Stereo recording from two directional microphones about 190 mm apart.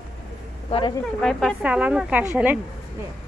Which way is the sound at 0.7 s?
30° left (ahead or behind).